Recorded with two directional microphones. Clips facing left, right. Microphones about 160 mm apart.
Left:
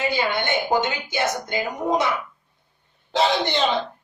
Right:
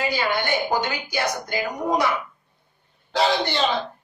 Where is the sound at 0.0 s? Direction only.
20° left (ahead or behind).